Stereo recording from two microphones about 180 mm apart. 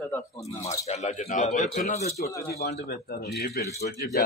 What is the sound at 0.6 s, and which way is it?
Speech, 35° left (ahead or behind).